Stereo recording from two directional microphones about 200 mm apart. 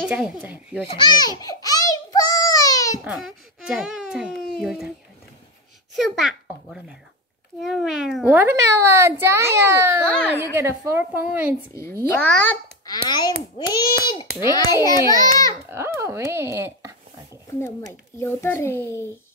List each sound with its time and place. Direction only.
0.0 s a child's voice: 5° right (ahead or behind)
0.9 s babbling: 20° left (ahead or behind)
3.0 s a child's voice: 5° right (ahead or behind)
5.9 s a child's voice: centre (ahead or behind)
10.0 s a child's voice: 5° left (ahead or behind)
10.4 s a child's voice: 10° right (ahead or behind)
11.8 s a child's voice: 10° left (ahead or behind)
13.1 s a child's voice: 20° left (ahead or behind)
15.7 s speech: 10° right (ahead or behind)
17.6 s a child's voice: 10° left (ahead or behind)